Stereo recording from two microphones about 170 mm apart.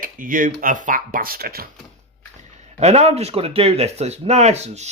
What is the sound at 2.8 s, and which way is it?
A man's voice, 40° right (ahead or behind).